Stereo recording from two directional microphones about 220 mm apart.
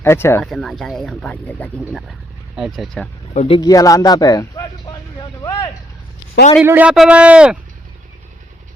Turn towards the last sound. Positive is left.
turn(degrees=-5)  # may be behind; listen again after turning